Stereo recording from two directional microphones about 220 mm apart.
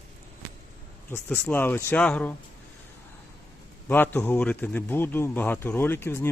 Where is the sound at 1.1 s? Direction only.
10° left (ahead or behind).